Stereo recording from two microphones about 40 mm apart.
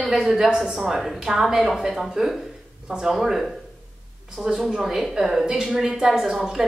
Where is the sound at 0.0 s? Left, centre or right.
Centre.